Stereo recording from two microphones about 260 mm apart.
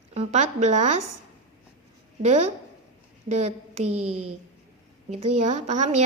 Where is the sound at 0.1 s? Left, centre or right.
Right.